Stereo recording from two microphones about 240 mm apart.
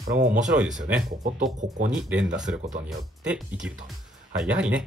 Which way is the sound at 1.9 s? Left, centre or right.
Centre.